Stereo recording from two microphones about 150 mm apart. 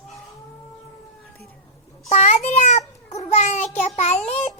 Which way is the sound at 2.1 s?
45° left (ahead or behind).